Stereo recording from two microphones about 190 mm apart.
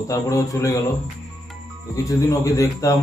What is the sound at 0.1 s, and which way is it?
Speech, 15° left (ahead or behind).